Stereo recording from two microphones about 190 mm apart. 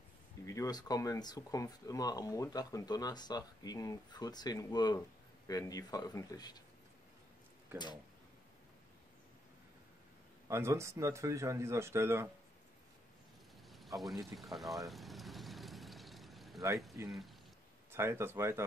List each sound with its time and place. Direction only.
0.5 s speech: 20° left (ahead or behind)
10.5 s speech: 15° right (ahead or behind)
13.7 s speech: centre (ahead or behind)
14.9 s vehicle: centre (ahead or behind)
17.9 s speech: 15° right (ahead or behind)